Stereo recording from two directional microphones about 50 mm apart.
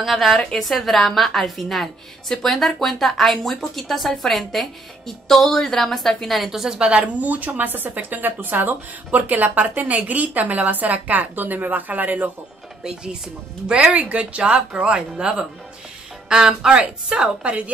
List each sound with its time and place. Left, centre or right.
0.0 s a woman's voice: centre
6.9 s speech: right
13.7 s a woman's voice: centre
13.9 s a woman's voice: right